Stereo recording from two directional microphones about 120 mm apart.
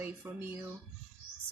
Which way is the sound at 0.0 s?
20° right (ahead or behind).